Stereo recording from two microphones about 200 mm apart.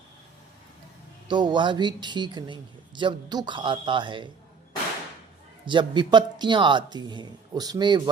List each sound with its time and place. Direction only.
1.3 s speech: 20° right (ahead or behind)
5.6 s speech: 25° right (ahead or behind)